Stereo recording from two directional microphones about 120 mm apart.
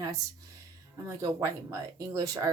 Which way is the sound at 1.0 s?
25° right (ahead or behind).